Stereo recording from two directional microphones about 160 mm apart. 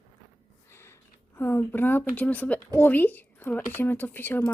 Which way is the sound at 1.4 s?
15° left (ahead or behind).